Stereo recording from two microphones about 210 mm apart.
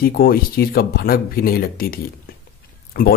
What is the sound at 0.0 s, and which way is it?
Speech, 45° left (ahead or behind).